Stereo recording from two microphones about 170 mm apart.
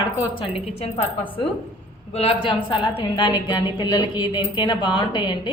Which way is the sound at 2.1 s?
35° left (ahead or behind).